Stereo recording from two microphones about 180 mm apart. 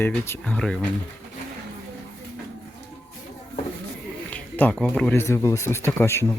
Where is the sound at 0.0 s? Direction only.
10° left (ahead or behind).